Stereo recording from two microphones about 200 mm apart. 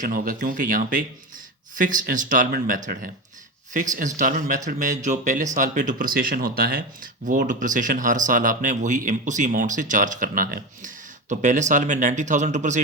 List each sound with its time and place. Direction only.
0.0 s speech: 45° right (ahead or behind)